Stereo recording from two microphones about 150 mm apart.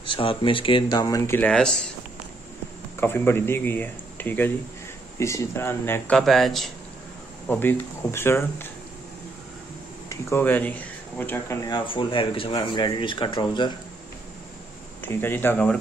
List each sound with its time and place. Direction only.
0.0 s speech: 35° left (ahead or behind); by 1.9 s 5° left (ahead or behind)
3.0 s speech: 15° left (ahead or behind)
6.1 s speech: centre (ahead or behind)
7.4 s speech: 15° left (ahead or behind)
10.0 s speech: 15° left (ahead or behind)
11.7 s speech: 35° left (ahead or behind)
15.0 s speech: 15° left (ahead or behind)